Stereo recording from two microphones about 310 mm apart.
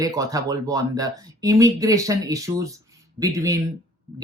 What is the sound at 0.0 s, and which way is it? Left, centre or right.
Speech, centre.